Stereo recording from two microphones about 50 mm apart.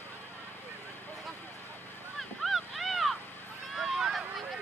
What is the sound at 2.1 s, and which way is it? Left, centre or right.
Vehicle, centre.